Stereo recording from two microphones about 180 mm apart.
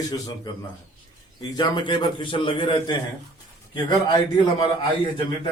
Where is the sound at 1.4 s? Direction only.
25° left (ahead or behind).